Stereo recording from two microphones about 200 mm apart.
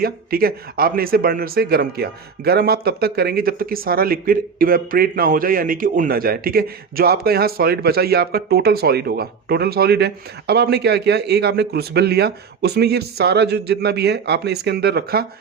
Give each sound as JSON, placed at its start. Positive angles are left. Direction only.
{"t": 0.0, "sound": "speech", "side_deg": -50}